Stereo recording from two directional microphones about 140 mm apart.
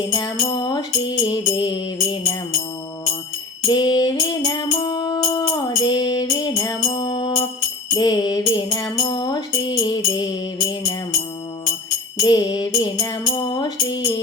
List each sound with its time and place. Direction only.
0.5 s music: 35° left (ahead or behind)
3.7 s music: 30° left (ahead or behind)
10.6 s music: 40° left (ahead or behind)
12.2 s music: 30° left (ahead or behind)